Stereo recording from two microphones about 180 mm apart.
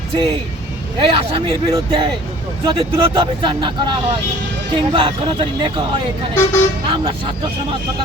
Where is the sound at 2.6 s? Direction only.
30° right (ahead or behind).